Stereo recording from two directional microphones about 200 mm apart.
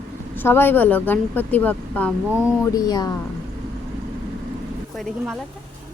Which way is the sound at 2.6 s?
20° left (ahead or behind).